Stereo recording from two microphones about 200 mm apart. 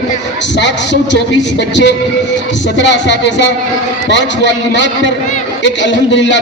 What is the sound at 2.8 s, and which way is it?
A man's voice, 60° left (ahead or behind).